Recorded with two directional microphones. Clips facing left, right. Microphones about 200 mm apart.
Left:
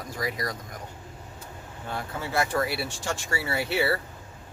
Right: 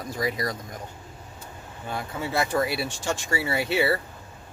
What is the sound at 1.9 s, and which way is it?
Speech, 15° right (ahead or behind).